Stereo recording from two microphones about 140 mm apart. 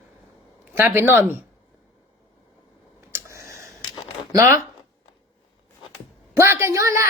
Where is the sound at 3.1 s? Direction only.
20° right (ahead or behind).